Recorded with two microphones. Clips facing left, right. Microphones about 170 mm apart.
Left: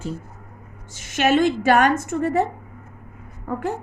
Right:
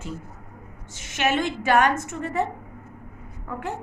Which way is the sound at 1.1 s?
40° left (ahead or behind).